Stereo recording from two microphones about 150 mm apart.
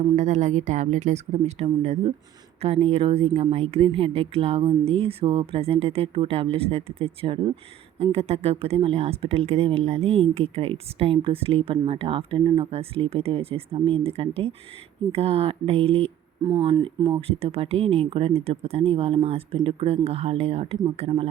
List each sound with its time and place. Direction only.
0.2 s a woman's voice: 50° right (ahead or behind)
17.2 s speech: 40° right (ahead or behind)